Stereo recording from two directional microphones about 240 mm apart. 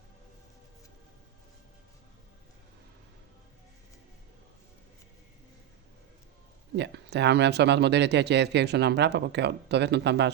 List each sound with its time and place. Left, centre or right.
6.7 s speech: right